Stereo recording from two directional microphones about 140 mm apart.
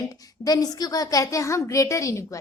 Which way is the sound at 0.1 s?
25° left (ahead or behind).